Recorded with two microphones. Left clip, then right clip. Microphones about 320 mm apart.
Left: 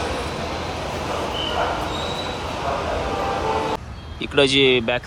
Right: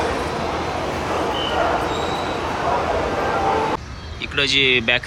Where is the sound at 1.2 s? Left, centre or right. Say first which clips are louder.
Right 3 dB; centre.